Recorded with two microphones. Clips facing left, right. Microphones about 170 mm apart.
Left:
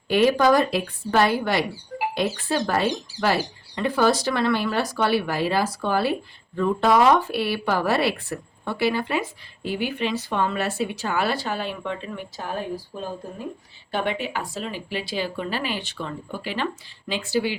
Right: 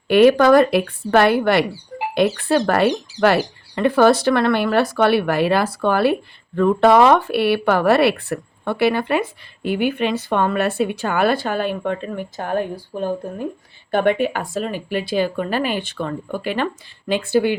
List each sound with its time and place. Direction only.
0.1 s speech: 65° right (ahead or behind)